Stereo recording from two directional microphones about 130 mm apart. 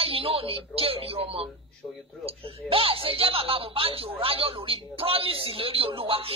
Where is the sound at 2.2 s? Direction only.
45° right (ahead or behind).